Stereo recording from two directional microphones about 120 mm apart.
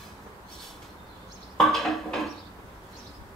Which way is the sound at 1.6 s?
Centre (ahead or behind).